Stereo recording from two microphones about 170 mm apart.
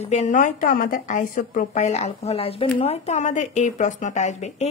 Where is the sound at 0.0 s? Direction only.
40° left (ahead or behind).